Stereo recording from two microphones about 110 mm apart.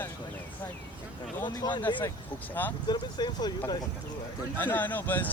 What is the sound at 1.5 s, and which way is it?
Speech, 40° left (ahead or behind).